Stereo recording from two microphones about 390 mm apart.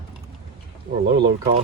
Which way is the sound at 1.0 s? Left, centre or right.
Right.